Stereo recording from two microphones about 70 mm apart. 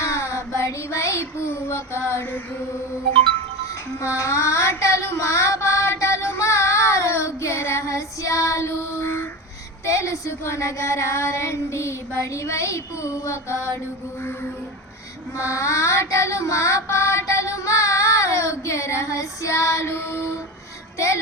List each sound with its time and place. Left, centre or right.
0.0 s child singing: left
4.0 s child singing: left
9.8 s child singing: left
15.4 s child singing: left